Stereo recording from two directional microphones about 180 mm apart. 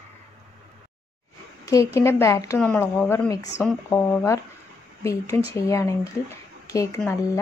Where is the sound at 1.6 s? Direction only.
15° left (ahead or behind).